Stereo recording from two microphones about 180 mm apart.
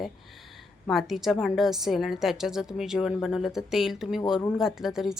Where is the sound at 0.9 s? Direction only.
Centre (ahead or behind).